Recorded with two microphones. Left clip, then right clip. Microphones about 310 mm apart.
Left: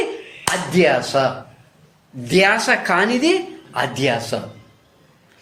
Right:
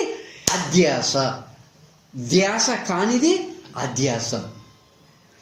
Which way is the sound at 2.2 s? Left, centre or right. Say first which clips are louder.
Left 5 dB; left.